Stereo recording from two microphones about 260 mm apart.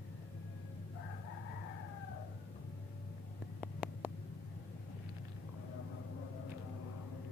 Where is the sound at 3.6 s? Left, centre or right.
Centre.